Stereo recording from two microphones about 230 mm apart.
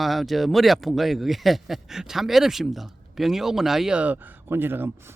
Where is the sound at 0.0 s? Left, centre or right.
Centre.